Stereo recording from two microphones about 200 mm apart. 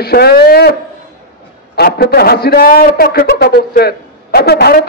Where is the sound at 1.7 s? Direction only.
50° left (ahead or behind).